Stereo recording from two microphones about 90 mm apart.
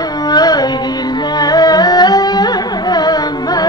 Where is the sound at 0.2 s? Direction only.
50° left (ahead or behind).